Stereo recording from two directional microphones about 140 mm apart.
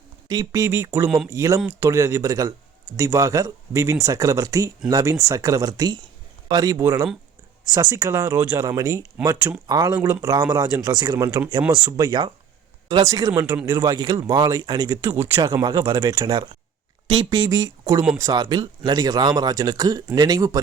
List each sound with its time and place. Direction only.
0.3 s speech: 25° right (ahead or behind)
13.3 s speech: 10° right (ahead or behind)
13.7 s speech: 25° right (ahead or behind)
15.6 s speech: 30° right (ahead or behind)